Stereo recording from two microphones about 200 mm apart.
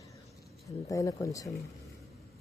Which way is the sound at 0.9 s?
15° left (ahead or behind).